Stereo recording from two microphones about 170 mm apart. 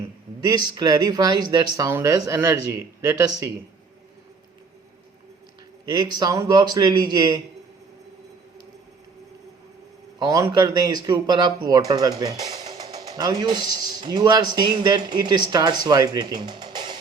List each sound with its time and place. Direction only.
0.4 s speech: 25° right (ahead or behind)
5.8 s speech: 25° right (ahead or behind)
10.2 s speech: 20° right (ahead or behind)